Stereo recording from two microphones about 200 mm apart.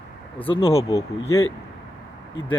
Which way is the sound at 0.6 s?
30° left (ahead or behind).